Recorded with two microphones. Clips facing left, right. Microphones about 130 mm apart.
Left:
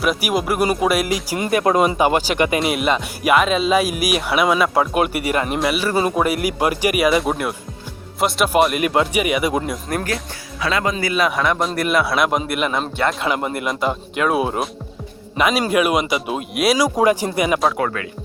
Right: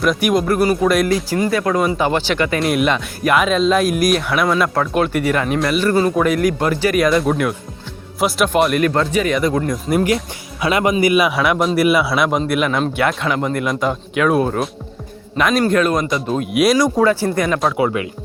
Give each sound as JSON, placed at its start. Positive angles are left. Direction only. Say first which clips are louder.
{"t": 0.0, "sound": "speech", "louder": "right 4 dB", "side_deg": 5}
{"t": 1.3, "sound": "speech", "louder": "even", "side_deg": 20}
{"t": 2.6, "sound": "speech", "louder": "right 2 dB", "side_deg": 0}
{"t": 8.9, "sound": "speech", "louder": "right 1 dB", "side_deg": 15}
{"t": 9.9, "sound": "speech", "louder": "right 9 dB", "side_deg": -10}
{"t": 16.7, "sound": "speech", "louder": "right 2 dB", "side_deg": 10}